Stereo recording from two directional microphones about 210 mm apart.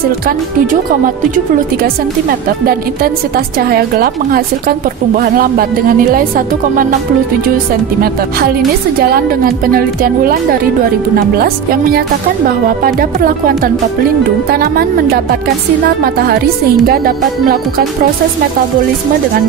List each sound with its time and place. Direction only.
0.7 s speech: 40° right (ahead or behind)
9.1 s speech: 45° right (ahead or behind)
11.3 s speech: 45° right (ahead or behind)
16.0 s speech: 45° right (ahead or behind)